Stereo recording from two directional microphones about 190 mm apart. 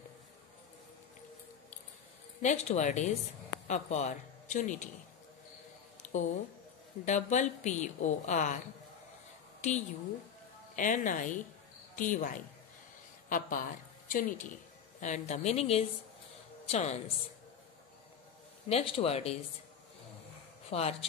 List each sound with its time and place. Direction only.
2.4 s a woman's voice: 40° left (ahead or behind)
6.0 s a sound: 40° left (ahead or behind)
7.1 s a woman's voice: 40° left (ahead or behind)
18.7 s a woman's voice: 30° left (ahead or behind)
20.7 s a woman's voice: 35° left (ahead or behind)